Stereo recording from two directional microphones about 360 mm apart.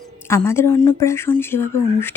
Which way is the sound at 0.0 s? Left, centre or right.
Centre.